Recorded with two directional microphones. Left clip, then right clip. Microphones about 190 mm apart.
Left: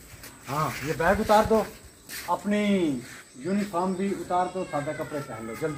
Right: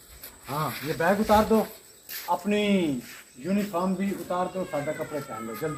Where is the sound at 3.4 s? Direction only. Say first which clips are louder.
Even; 50° right (ahead or behind).